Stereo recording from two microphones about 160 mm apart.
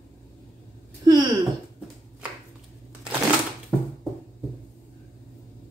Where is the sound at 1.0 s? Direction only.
25° right (ahead or behind).